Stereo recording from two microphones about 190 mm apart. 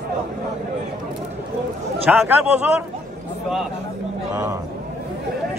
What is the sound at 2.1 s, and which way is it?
Speech, 5° right (ahead or behind).